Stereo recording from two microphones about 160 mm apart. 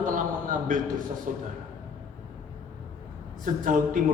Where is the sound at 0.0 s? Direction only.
55° right (ahead or behind).